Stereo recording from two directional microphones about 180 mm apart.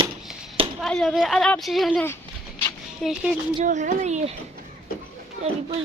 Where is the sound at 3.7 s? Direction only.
45° right (ahead or behind).